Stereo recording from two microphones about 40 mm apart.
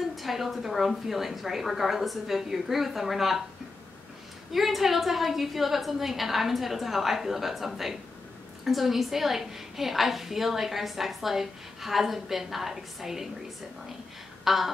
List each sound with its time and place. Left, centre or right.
0.1 s a woman's voice: centre
4.5 s a woman's voice: centre
14.4 s a sound: centre